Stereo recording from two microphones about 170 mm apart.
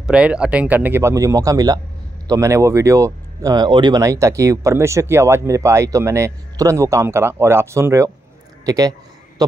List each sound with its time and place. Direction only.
0.0 s a man's voice: 5° right (ahead or behind)